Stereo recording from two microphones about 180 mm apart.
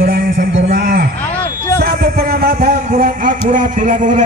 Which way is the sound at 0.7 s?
60° right (ahead or behind).